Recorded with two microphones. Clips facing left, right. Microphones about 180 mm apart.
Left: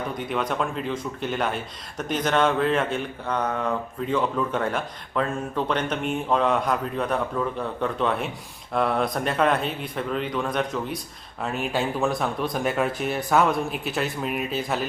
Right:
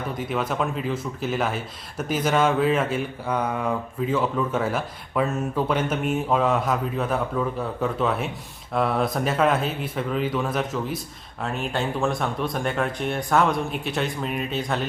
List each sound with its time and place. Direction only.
0.2 s speech: centre (ahead or behind)